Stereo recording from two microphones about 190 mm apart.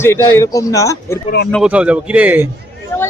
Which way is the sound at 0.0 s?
15° left (ahead or behind).